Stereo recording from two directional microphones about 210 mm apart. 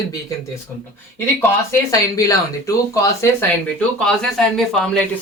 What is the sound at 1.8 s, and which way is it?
Speech, 15° left (ahead or behind).